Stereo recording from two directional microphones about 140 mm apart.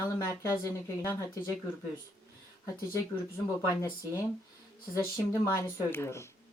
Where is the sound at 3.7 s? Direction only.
25° left (ahead or behind).